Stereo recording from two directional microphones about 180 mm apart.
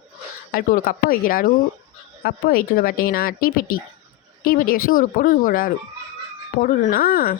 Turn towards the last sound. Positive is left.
turn(degrees=55)  # may be behind; listen again after turning